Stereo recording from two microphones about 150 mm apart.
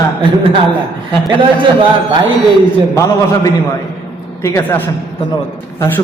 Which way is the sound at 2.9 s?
20° left (ahead or behind).